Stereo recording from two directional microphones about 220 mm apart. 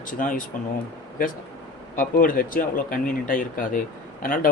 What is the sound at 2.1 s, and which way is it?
Speech, 40° left (ahead or behind).